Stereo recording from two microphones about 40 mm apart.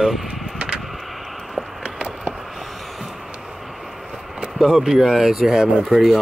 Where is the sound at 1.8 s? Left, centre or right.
Right.